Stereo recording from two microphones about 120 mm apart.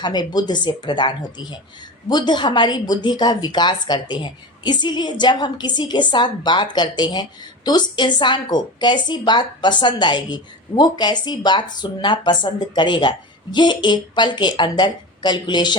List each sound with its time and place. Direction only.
0.0 s a woman's voice: 35° left (ahead or behind)